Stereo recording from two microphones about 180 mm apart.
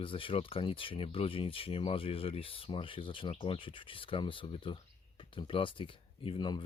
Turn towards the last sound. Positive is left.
turn(degrees=25)  # may be behind; listen again after turning